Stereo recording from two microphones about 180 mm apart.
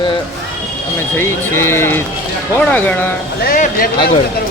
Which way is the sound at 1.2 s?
15° left (ahead or behind).